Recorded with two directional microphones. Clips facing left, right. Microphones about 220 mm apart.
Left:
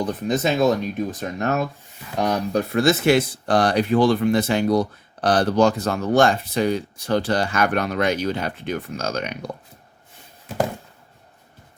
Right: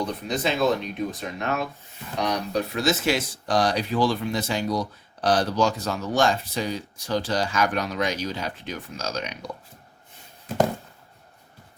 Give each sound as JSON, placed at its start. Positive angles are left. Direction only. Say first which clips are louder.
{"t": 0.0, "sound": "speech", "louder": "left 5 dB", "side_deg": 50}